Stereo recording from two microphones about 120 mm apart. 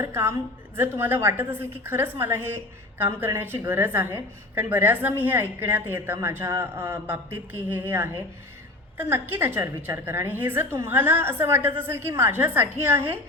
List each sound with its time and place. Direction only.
0.0 s a woman's voice: 20° right (ahead or behind)